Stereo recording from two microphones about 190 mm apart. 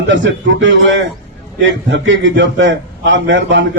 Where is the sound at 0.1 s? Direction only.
80° right.